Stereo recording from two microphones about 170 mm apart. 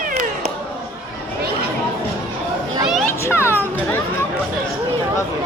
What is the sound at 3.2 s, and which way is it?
Children playing, 15° left (ahead or behind).